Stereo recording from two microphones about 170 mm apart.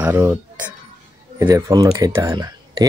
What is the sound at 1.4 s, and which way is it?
Speech, 20° right (ahead or behind).